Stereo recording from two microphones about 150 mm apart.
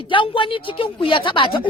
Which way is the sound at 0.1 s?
35° left (ahead or behind).